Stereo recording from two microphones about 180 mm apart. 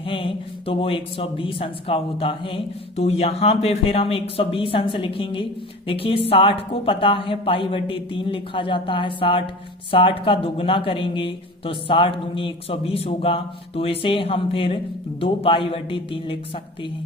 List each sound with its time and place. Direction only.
0.0 s a woman's voice: 30° left (ahead or behind)